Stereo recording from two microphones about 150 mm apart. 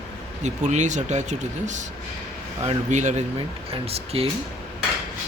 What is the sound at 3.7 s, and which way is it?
Speech, 40° right (ahead or behind).